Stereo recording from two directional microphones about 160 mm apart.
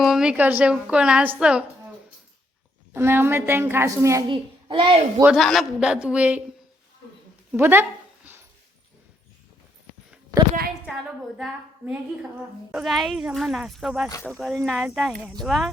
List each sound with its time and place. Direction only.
0.0 s speech: 5° right (ahead or behind)
2.9 s speech: 15° right (ahead or behind)
4.3 s a child's voice: 30° right (ahead or behind)
5.2 s speech: centre (ahead or behind)
7.5 s a sound: 15° right (ahead or behind)
11.3 s speech: centre (ahead or behind)